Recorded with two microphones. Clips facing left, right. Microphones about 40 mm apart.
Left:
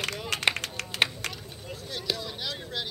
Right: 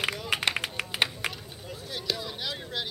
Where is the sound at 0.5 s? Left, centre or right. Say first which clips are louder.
Even; centre.